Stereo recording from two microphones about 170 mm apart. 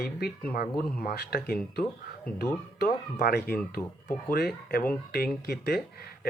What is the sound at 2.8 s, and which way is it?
Speech, 60° left (ahead or behind).